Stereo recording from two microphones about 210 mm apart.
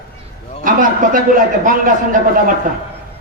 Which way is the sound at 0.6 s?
40° right (ahead or behind).